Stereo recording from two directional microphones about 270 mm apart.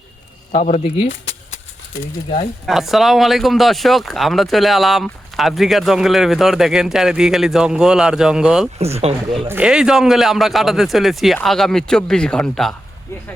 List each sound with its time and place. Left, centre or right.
0.5 s speech: left
2.6 s speech: centre
8.8 s speech: right
9.5 s speech: centre